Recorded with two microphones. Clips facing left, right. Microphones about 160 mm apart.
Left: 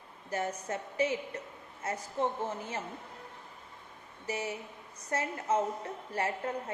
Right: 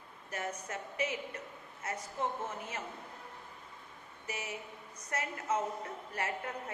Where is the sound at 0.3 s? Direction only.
30° left (ahead or behind).